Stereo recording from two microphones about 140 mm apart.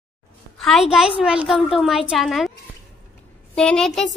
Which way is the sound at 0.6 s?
Centre (ahead or behind).